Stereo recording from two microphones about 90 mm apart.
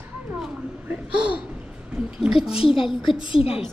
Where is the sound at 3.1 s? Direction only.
60° left (ahead or behind).